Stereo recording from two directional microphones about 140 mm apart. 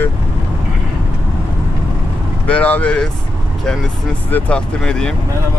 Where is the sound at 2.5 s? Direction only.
10° left (ahead or behind).